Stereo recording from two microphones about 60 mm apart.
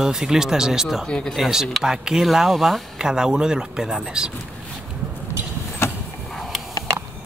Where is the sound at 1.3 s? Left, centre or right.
Centre.